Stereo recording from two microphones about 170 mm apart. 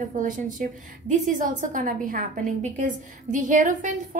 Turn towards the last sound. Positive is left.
turn(degrees=-50)  # may be behind; listen again after turning